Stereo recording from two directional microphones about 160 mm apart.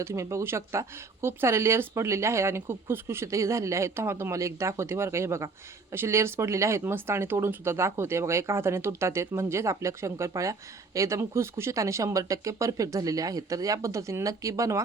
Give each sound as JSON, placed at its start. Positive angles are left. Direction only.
{"t": 0.0, "sound": "speech", "side_deg": -20}